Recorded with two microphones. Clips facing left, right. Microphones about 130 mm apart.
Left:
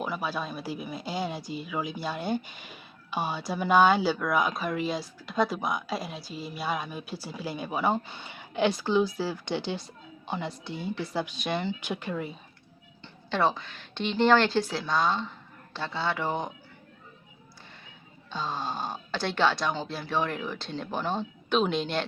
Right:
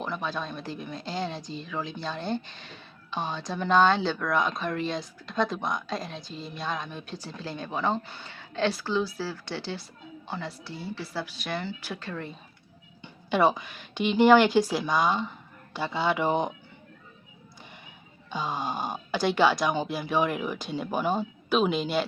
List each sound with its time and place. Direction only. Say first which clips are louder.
0.0 s speech: left 1 dB; 5° left (ahead or behind)
13.0 s a woman's voice: right 3 dB; 15° right (ahead or behind)
18.3 s speech: right 2 dB; 15° right (ahead or behind)